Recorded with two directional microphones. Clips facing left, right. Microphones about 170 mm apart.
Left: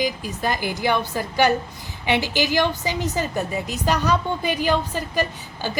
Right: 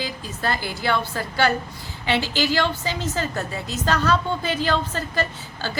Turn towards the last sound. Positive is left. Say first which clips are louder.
# left 2 dB
turn(degrees=15)  # may be behind; listen again after turning